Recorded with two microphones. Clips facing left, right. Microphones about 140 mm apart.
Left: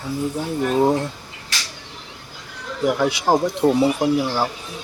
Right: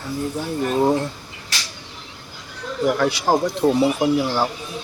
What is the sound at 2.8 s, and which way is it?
Speech, 15° left (ahead or behind).